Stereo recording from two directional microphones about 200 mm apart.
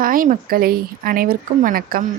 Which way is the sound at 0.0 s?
45° right (ahead or behind).